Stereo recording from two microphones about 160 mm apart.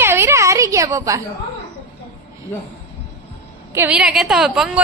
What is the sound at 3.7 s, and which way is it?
Speech, 10° right (ahead or behind).